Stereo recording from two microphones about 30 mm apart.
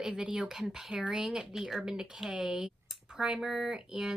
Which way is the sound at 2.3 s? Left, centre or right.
Right.